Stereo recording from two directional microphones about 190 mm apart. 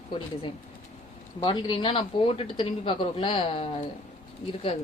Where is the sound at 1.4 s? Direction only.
20° left (ahead or behind).